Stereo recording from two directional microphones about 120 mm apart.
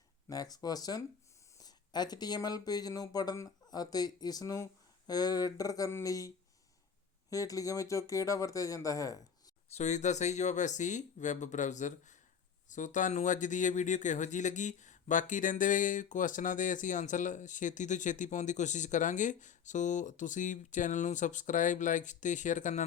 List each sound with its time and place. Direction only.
0.3 s speech: 30° left (ahead or behind)
9.7 s speech: 75° left (ahead or behind)